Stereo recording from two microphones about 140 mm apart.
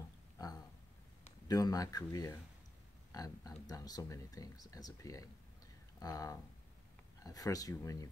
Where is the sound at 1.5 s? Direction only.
30° left (ahead or behind).